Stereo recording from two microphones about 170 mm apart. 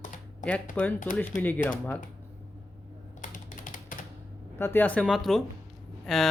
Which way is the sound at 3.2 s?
50° left (ahead or behind).